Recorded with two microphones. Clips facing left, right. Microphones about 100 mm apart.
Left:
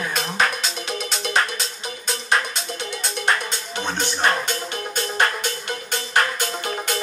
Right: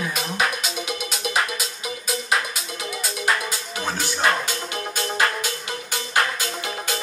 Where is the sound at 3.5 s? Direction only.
35° left (ahead or behind).